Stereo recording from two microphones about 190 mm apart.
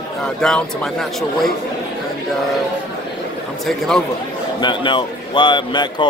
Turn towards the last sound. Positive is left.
turn(degrees=25)  # may be behind; listen again after turning